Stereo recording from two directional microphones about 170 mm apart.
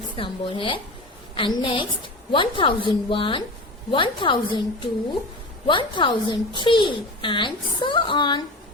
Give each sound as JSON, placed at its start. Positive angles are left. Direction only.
{"t": 0.2, "sound": "a woman's voice", "side_deg": 30}